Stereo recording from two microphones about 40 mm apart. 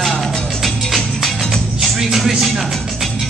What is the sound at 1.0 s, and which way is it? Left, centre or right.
Music, centre.